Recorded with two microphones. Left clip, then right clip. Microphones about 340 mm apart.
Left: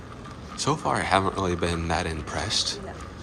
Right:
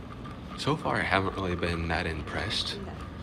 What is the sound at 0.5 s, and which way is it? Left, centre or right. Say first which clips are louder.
Speech: left 4 dB; centre.